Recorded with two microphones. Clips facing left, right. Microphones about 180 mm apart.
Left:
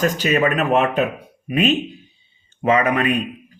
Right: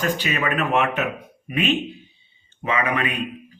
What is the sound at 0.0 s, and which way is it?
A man's voice, 40° left (ahead or behind).